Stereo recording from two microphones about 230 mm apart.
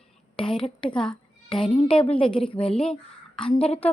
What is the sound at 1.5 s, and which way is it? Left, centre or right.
A woman's voice, left.